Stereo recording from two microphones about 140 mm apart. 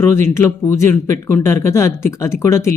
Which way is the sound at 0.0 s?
20° left (ahead or behind).